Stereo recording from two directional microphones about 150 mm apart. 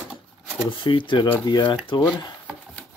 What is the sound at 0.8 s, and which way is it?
Speech, 35° left (ahead or behind).